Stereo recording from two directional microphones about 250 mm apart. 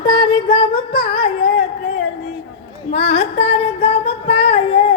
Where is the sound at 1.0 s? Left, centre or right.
Centre.